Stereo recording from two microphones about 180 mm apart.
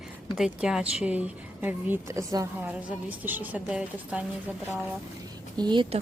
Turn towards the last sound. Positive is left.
turn(degrees=-25)  # may be behind; listen again after turning